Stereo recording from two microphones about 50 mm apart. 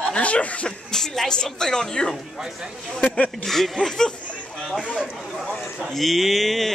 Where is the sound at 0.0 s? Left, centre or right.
Left.